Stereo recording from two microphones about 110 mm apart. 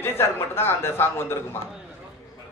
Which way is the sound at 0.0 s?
20° left (ahead or behind).